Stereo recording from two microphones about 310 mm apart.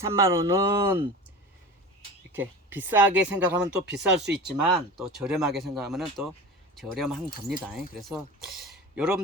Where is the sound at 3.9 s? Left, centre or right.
Right.